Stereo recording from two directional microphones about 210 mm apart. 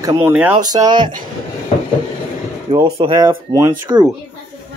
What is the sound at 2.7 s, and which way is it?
Speech, 25° right (ahead or behind).